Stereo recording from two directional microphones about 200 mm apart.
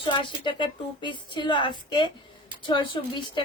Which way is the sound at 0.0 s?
25° left (ahead or behind).